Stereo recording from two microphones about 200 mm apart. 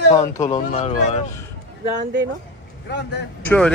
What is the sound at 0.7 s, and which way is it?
Speech, 35° left (ahead or behind).